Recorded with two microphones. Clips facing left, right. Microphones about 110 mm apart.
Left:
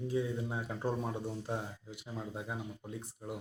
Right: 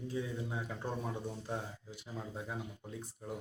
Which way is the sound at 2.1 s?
15° left (ahead or behind).